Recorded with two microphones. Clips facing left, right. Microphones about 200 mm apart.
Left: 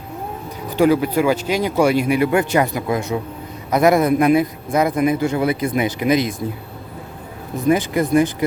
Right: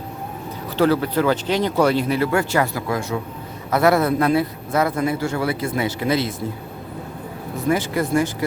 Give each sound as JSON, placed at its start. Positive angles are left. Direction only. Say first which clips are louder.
{"t": 0.8, "sound": "a man's voice", "louder": "left 3 dB", "side_deg": 15}
{"t": 7.7, "sound": "speech", "louder": "left 4 dB", "side_deg": 20}